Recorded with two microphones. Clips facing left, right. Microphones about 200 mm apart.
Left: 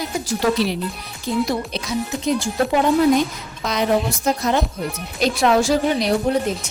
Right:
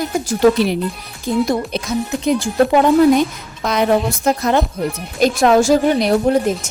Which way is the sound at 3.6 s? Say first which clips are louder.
Right 4 dB; 55° right (ahead or behind).